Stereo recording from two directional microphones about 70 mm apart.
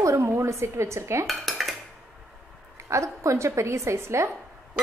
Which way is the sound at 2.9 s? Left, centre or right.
Right.